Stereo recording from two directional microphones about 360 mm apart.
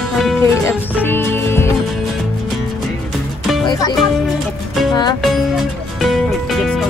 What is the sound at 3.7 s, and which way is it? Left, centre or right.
Speech, centre.